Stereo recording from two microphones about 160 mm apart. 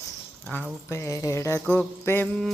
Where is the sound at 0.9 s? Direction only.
20° left (ahead or behind).